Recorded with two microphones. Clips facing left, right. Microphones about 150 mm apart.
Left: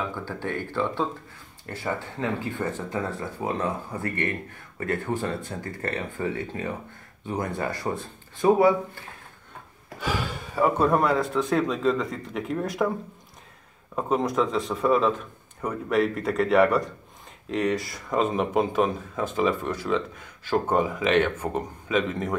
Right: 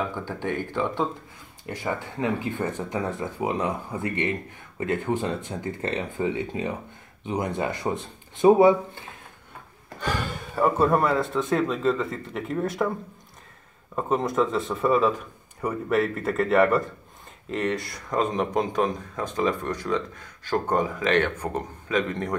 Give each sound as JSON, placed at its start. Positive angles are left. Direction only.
{"t": 0.1, "sound": "speech", "side_deg": -15}
{"t": 9.9, "sound": "speech", "side_deg": 5}
{"t": 13.9, "sound": "speech", "side_deg": 0}